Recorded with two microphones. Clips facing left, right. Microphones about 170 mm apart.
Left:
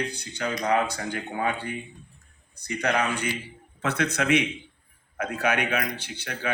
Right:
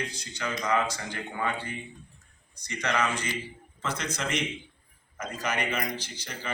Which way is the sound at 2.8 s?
60° left (ahead or behind).